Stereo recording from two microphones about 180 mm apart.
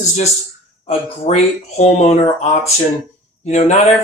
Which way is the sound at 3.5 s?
40° left (ahead or behind).